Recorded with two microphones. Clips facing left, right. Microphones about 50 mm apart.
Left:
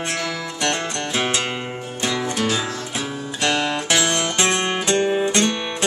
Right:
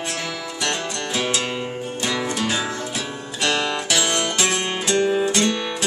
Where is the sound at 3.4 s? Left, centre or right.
Centre.